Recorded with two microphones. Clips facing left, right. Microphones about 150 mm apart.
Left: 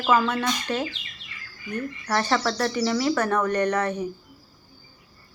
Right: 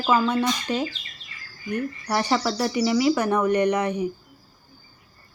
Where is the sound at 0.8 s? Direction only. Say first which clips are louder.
Right 3 dB; 35° right (ahead or behind).